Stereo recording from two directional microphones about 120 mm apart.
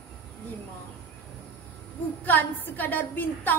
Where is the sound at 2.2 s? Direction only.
15° left (ahead or behind).